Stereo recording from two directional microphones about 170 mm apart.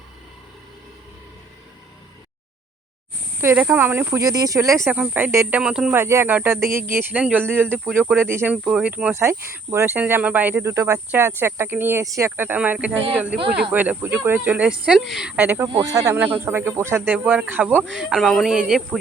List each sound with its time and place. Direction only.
3.4 s speech: 10° right (ahead or behind)